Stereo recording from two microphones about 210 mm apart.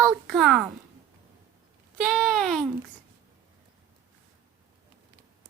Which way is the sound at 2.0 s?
Centre (ahead or behind).